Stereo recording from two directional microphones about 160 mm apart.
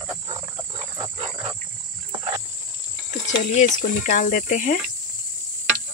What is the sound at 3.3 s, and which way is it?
Speech, 50° left (ahead or behind).